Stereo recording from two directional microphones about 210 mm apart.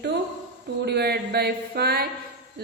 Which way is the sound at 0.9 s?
50° right (ahead or behind).